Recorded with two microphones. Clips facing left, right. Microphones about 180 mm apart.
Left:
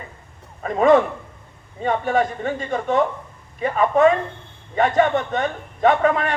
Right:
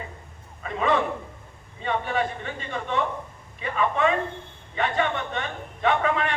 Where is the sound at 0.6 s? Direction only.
45° left (ahead or behind).